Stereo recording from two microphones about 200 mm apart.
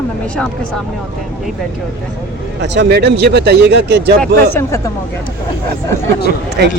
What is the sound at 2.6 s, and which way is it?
Speech, 60° right (ahead or behind).